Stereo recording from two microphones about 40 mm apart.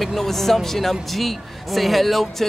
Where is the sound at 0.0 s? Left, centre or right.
Centre.